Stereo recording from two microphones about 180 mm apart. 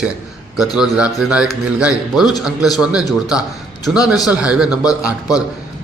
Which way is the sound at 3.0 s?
20° left (ahead or behind).